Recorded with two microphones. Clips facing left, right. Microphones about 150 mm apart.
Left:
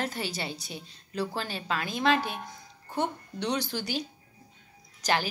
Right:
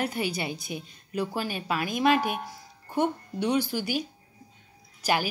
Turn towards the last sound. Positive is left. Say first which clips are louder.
# right 2 dB
turn(degrees=-10)  # may be behind; listen again after turning